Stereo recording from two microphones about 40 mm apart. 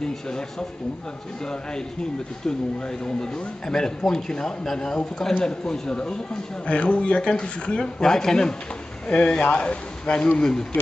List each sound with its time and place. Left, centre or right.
0.1 s speech: centre
6.6 s speech: left; by 8.5 s centre
9.0 s speech: left
10.4 s speech: centre